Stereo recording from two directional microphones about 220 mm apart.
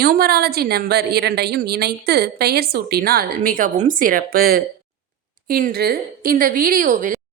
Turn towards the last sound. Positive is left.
turn(degrees=-35)  # may be behind; listen again after turning